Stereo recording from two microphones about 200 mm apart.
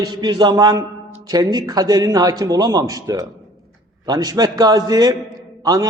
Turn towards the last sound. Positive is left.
turn(degrees=-20)  # may be behind; listen again after turning